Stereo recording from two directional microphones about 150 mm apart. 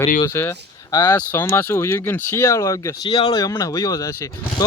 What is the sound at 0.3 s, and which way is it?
Speech, 20° left (ahead or behind).